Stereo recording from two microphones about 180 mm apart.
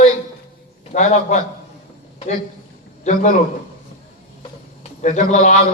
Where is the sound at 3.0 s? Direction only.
40° left (ahead or behind).